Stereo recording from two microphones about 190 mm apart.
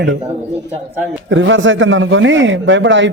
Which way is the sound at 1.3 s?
85° right.